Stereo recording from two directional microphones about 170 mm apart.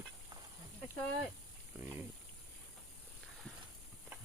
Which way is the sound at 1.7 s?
10° right (ahead or behind).